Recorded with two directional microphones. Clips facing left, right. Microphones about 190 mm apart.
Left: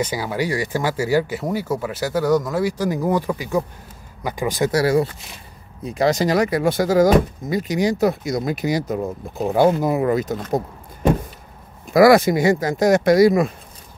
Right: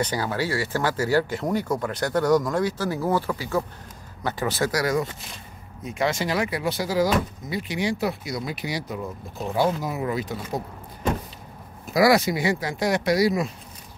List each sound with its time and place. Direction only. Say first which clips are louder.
0.0 s speech: left 3 dB; 10° left (ahead or behind)
4.6 s speech: left 8 dB; 30° left (ahead or behind); by 10.3 s 50° left (ahead or behind)
11.9 s speech: left 7 dB; 50° left (ahead or behind)